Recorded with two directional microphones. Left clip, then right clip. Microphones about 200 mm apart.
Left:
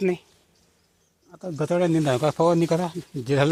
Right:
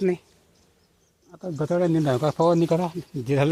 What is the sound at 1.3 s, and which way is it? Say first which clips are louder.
Speech: left 1 dB; centre (ahead or behind).